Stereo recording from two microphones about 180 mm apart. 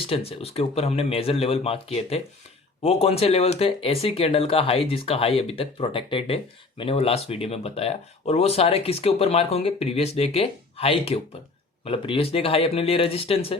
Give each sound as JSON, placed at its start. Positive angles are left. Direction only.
{"t": 0.1, "sound": "speech", "side_deg": 30}